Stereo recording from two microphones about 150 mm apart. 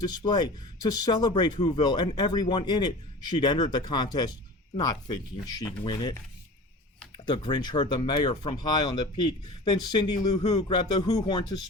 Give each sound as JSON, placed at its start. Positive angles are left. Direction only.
{"t": 0.0, "sound": "speech", "side_deg": 25}
{"t": 7.3, "sound": "speech", "side_deg": 30}